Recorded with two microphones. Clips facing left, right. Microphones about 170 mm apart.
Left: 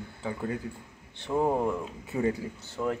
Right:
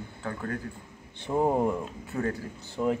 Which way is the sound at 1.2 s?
15° right (ahead or behind).